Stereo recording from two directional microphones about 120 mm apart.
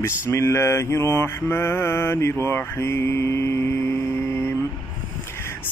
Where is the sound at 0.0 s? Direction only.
20° left (ahead or behind).